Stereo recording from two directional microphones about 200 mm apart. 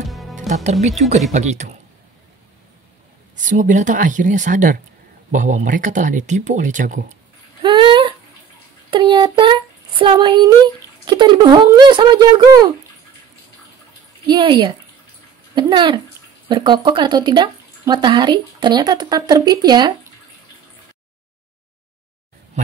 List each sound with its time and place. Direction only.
0.1 s music: centre (ahead or behind)
0.7 s speech: 35° right (ahead or behind)
3.3 s speech: 40° right (ahead or behind)
7.6 s a sound: 25° right (ahead or behind)
11.1 s speech: 20° right (ahead or behind)
14.2 s speech: 25° right (ahead or behind)